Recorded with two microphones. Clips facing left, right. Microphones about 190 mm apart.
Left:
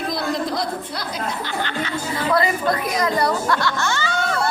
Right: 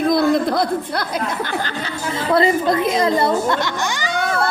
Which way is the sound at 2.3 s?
25° right (ahead or behind).